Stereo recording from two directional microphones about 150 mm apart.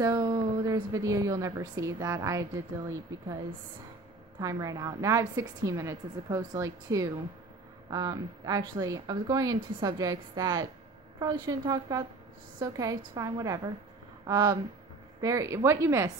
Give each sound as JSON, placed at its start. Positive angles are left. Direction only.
{"t": 0.0, "sound": "speech", "side_deg": -25}
{"t": 4.4, "sound": "speech", "side_deg": -20}